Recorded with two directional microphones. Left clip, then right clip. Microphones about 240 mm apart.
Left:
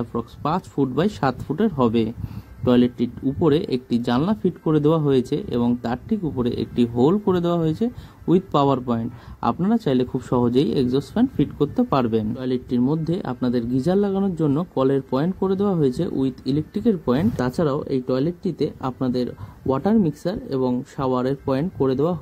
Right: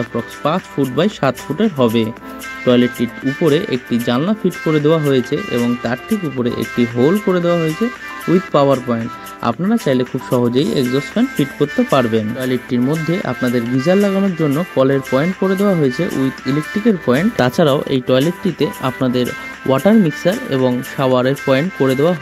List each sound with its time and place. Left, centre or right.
0.4 s speech: centre